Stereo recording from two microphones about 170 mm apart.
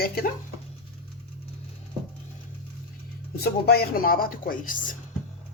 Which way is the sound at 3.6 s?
65° left (ahead or behind).